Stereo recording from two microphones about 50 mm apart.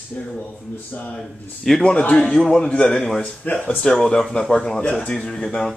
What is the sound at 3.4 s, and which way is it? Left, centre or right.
Speech, left.